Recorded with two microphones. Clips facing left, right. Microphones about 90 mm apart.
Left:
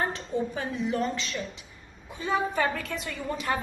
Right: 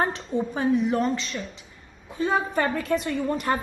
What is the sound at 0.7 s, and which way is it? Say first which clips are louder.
Speech: right 3 dB; 55° right (ahead or behind).